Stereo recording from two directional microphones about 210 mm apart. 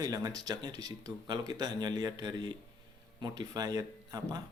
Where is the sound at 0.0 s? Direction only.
20° right (ahead or behind).